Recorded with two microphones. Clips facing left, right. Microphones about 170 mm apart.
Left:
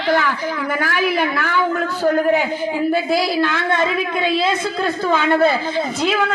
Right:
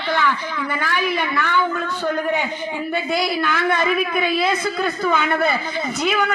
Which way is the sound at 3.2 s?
30° left (ahead or behind).